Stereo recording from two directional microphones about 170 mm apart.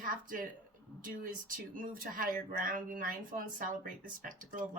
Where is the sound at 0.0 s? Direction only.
55° right (ahead or behind).